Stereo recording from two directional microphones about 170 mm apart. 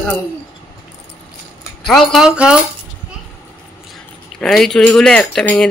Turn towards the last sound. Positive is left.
turn(degrees=5)  # may be behind; listen again after turning